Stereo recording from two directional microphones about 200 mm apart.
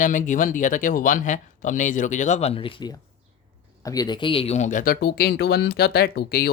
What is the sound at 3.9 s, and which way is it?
Speech, 20° left (ahead or behind).